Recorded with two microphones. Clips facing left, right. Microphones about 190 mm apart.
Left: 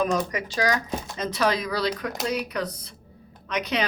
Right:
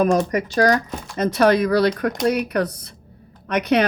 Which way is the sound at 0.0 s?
50° right (ahead or behind).